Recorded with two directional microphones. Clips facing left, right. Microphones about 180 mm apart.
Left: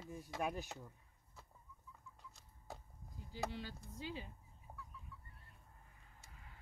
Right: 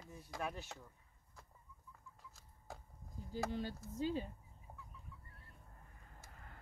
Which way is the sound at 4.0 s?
45° right (ahead or behind).